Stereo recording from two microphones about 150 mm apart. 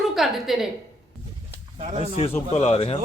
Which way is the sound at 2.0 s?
40° left (ahead or behind).